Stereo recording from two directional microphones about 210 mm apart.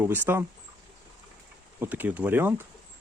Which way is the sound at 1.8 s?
10° right (ahead or behind).